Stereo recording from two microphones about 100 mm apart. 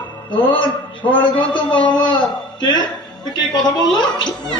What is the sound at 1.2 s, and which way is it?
Gargling, 55° left (ahead or behind).